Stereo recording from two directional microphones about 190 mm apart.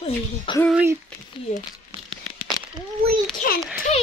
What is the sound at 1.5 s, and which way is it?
Speech, 35° left (ahead or behind).